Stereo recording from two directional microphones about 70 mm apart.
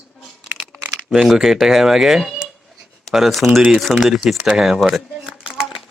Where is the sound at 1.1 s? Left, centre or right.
Centre.